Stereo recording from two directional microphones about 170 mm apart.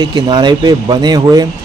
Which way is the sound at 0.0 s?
25° right (ahead or behind).